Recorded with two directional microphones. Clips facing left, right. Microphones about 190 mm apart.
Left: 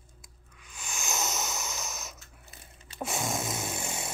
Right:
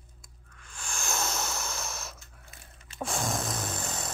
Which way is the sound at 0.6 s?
Centre (ahead or behind).